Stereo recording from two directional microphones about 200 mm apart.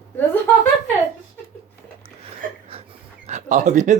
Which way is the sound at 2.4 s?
40° right (ahead or behind).